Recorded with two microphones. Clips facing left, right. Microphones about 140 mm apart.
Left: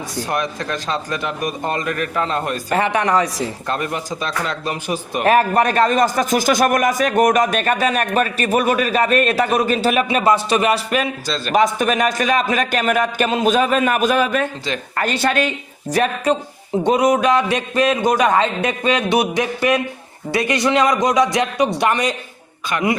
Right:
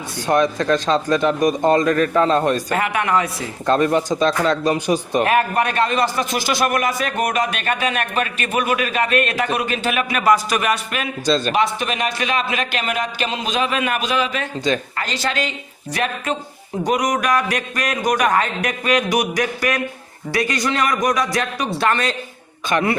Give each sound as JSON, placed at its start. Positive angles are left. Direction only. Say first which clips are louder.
{"t": 0.3, "sound": "a man's voice", "louder": "right 8 dB", "side_deg": -25}
{"t": 2.7, "sound": "a man's voice", "louder": "left 2 dB", "side_deg": 30}
{"t": 3.7, "sound": "speech", "louder": "right 11 dB", "side_deg": -30}
{"t": 5.2, "sound": "a man's voice", "louder": "left 7 dB", "side_deg": 35}
{"t": 11.5, "sound": "a man's voice", "louder": "left 4 dB", "side_deg": 45}
{"t": 16.8, "sound": "a man's voice", "louder": "left 4 dB", "side_deg": 30}